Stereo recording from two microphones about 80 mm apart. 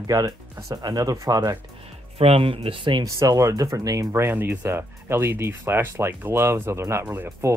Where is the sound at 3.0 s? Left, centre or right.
Right.